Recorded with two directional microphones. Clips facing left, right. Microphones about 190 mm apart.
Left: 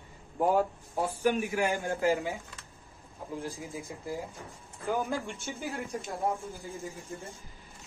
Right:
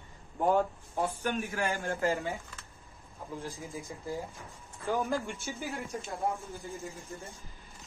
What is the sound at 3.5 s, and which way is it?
Speech, 15° left (ahead or behind).